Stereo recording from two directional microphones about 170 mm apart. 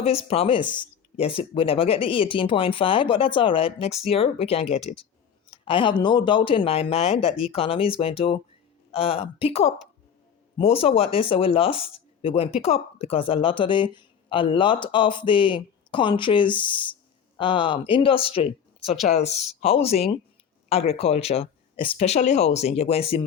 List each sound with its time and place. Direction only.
0.0 s speech: 35° left (ahead or behind)